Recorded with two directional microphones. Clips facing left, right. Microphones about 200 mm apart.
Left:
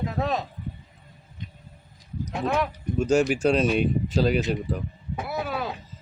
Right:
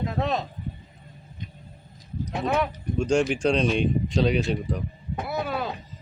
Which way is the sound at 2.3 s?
Centre (ahead or behind).